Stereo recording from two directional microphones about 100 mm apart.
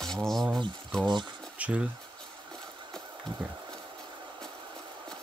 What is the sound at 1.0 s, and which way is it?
Speech, 50° right (ahead or behind).